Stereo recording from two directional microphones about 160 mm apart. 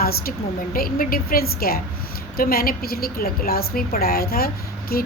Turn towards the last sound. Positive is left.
turn(degrees=70)  # may be behind; listen again after turning